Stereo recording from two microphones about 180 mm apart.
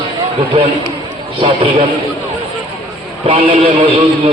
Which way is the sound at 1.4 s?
30° right (ahead or behind).